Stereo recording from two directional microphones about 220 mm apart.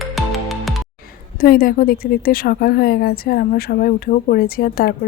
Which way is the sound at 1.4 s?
40° left (ahead or behind).